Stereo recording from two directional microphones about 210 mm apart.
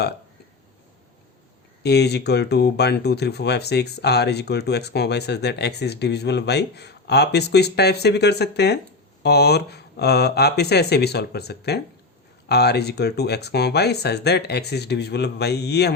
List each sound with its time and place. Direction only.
1.8 s speech: 50° left (ahead or behind)